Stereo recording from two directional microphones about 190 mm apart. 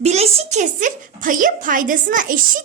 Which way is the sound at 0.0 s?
35° right (ahead or behind).